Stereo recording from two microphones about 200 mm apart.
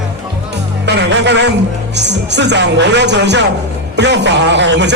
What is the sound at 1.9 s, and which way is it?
Speech, 60° right (ahead or behind).